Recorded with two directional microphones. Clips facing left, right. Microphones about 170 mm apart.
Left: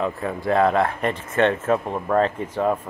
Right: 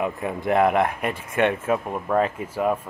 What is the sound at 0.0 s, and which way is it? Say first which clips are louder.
Speech: left 1 dB; 15° right (ahead or behind).